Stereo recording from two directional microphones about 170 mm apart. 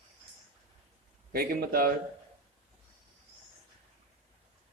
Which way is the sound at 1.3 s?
60° right (ahead or behind).